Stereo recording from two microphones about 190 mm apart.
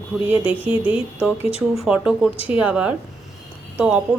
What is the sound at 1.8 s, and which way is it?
A woman's voice, 5° right (ahead or behind).